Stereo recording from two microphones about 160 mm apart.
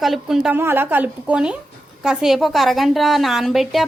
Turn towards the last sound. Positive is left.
turn(degrees=0)  # may be behind; listen again after turning